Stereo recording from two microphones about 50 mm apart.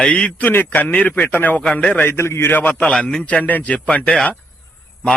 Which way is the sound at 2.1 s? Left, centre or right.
Left.